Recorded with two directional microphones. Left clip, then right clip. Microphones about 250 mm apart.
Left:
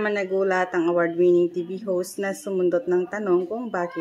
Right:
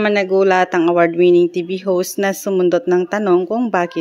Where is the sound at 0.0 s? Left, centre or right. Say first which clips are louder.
Right 9 dB; right.